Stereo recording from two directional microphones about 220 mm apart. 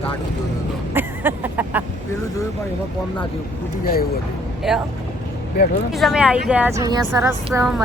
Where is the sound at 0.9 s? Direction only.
10° right (ahead or behind).